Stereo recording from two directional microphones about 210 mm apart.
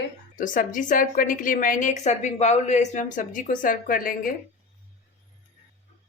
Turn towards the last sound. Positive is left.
turn(degrees=40)  # may be behind; listen again after turning